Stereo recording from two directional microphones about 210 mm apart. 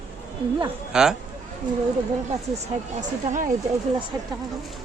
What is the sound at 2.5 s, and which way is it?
Speech, 35° right (ahead or behind).